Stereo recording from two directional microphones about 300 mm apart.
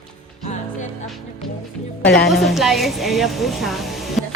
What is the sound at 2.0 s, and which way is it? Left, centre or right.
Speech, left.